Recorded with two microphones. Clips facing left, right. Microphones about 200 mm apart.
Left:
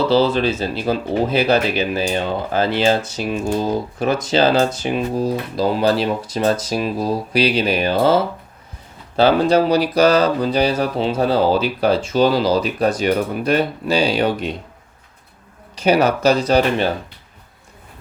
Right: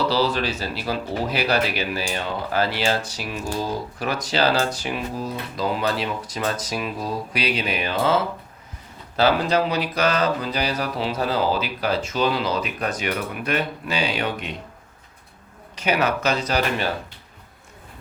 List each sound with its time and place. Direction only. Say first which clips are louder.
0.1 s speech: left 7 dB; 25° left (ahead or behind)
5.2 s speech: left 7 dB; 35° left (ahead or behind)
15.7 s speech: left 7 dB; 35° left (ahead or behind)